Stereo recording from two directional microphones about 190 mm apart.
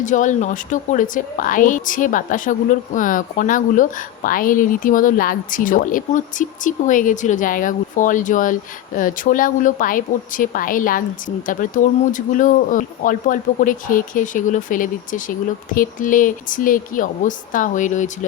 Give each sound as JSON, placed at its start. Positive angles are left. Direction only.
{"t": 0.0, "sound": "a woman's voice", "side_deg": 40}